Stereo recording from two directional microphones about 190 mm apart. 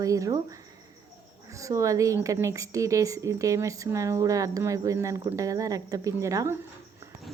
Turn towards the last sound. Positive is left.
turn(degrees=-15)  # may be behind; listen again after turning